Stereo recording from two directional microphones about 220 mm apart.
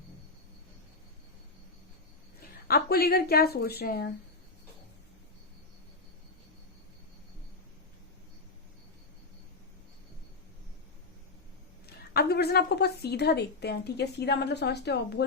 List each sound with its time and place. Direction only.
2.6 s a woman's voice: 45° left (ahead or behind)
12.1 s a woman's voice: 45° left (ahead or behind)